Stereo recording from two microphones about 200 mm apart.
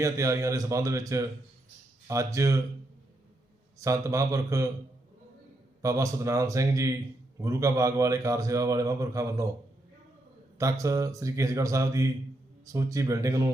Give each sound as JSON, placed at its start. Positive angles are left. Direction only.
{"t": 0.0, "sound": "a man's voice", "side_deg": -15}
{"t": 3.8, "sound": "a man's voice", "side_deg": -15}
{"t": 5.8, "sound": "a man's voice", "side_deg": -15}
{"t": 10.6, "sound": "a man's voice", "side_deg": -15}